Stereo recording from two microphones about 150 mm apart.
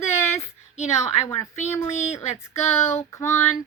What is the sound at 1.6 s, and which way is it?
A woman's voice, 15° left (ahead or behind).